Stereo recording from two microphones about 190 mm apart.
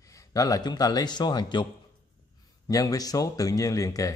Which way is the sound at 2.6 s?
20° left (ahead or behind).